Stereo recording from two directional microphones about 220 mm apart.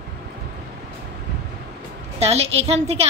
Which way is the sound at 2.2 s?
30° right (ahead or behind).